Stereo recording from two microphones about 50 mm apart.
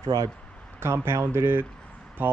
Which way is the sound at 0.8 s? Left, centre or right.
Right.